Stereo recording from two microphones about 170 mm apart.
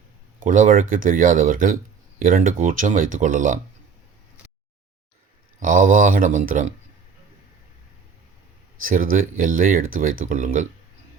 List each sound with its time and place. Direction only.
0.3 s speech: 50° right (ahead or behind)
5.5 s speech: 50° right (ahead or behind)
8.8 s speech: 55° right (ahead or behind)